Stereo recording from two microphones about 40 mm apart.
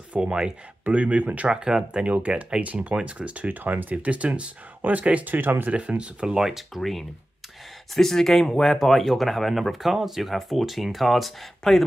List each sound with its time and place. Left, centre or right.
0.1 s speech: right
0.8 s speech: right
1.5 s speech: centre
2.0 s speech: right
3.9 s speech: right
5.3 s speech: right
5.7 s speech: right
6.2 s speech: centre